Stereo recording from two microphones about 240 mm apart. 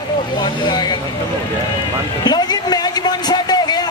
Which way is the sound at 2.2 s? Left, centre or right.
Centre.